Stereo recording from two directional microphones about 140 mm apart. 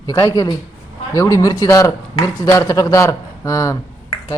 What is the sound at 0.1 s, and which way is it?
A man's voice, 25° left (ahead or behind).